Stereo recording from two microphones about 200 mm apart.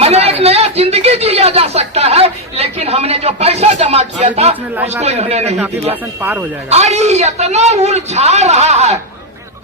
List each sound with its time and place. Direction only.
0.0 s a sound: 30° right (ahead or behind)
4.9 s a man's voice: 30° right (ahead or behind)
5.9 s speech: 10° right (ahead or behind)
6.7 s a man's voice: 35° right (ahead or behind)